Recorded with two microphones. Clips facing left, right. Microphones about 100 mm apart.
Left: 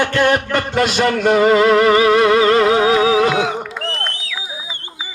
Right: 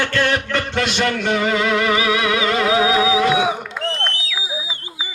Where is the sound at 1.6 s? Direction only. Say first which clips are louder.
Left 6 dB; 40° left (ahead or behind).